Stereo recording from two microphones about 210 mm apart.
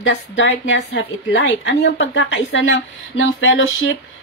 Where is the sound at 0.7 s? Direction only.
60° left (ahead or behind).